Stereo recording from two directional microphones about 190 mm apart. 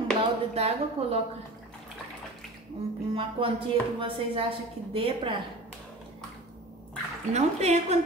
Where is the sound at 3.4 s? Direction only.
30° right (ahead or behind).